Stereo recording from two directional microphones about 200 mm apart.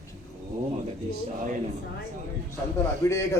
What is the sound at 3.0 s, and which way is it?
Speech, 15° left (ahead or behind).